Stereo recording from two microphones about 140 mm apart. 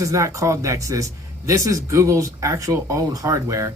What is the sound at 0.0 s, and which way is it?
Speech, 20° right (ahead or behind).